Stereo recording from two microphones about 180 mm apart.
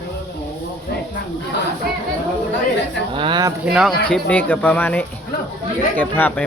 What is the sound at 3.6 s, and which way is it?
Speech, 5° right (ahead or behind).